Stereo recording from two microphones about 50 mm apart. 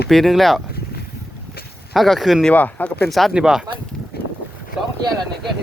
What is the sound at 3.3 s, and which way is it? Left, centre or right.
Speech, centre.